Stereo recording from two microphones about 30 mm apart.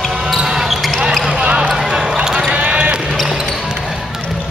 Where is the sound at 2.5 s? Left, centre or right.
Right.